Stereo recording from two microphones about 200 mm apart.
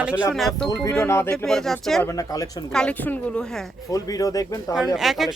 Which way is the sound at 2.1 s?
15° left (ahead or behind).